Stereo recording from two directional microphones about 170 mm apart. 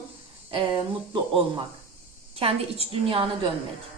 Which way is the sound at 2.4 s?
35° right (ahead or behind).